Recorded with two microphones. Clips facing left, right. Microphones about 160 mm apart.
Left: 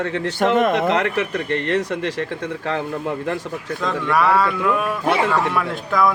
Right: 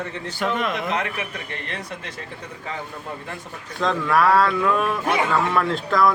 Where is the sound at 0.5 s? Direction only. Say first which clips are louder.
Left 9 dB; 45° left (ahead or behind).